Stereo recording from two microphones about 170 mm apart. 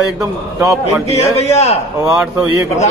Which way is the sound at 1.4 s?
40° left (ahead or behind).